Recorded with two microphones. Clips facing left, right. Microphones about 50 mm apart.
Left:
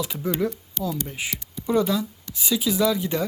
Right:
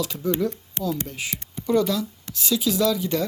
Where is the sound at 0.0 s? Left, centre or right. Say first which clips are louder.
Right 1 dB; centre.